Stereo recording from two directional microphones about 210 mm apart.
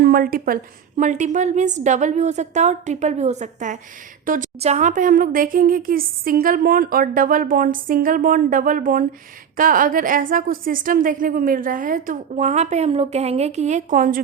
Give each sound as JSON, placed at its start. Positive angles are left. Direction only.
{"t": 0.0, "sound": "a woman's voice", "side_deg": -45}